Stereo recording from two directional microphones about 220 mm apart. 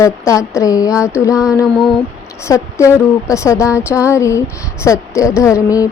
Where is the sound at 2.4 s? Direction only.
15° left (ahead or behind).